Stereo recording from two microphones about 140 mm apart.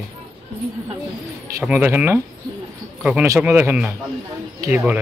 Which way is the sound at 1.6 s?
10° right (ahead or behind).